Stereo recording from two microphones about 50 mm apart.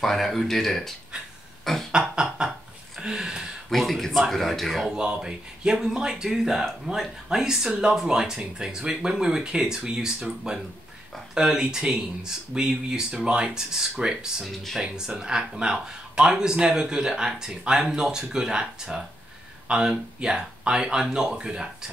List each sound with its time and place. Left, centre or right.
0.0 s a man's voice: centre
1.6 s beatboxing: centre
1.9 s speech: centre
3.0 s a sound: centre
3.7 s a man's voice: centre
4.9 s speech: centre